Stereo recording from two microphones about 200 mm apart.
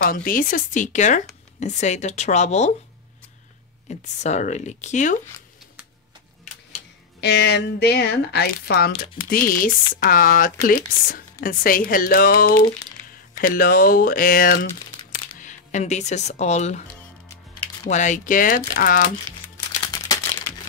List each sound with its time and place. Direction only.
0.0 s speech: 45° left (ahead or behind)
3.9 s speech: 35° left (ahead or behind)
7.2 s speech: 55° left (ahead or behind); by 16.8 s 35° left (ahead or behind)
17.8 s speech: 35° left (ahead or behind)